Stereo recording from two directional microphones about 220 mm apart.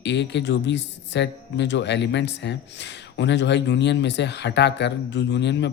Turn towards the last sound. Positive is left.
turn(degrees=50)  # may be behind; listen again after turning